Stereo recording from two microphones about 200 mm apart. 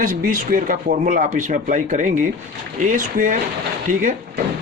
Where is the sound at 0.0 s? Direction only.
40° right (ahead or behind).